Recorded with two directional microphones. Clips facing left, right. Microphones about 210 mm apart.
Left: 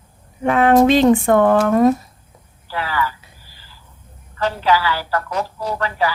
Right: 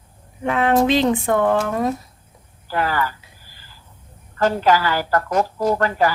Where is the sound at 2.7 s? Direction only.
45° right (ahead or behind).